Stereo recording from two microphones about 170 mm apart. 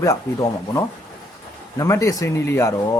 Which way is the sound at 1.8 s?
20° left (ahead or behind).